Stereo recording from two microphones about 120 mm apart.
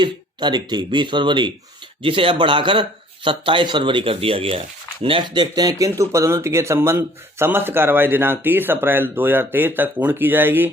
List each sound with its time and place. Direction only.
0.0 s speech: 40° right (ahead or behind); by 10.7 s 15° right (ahead or behind)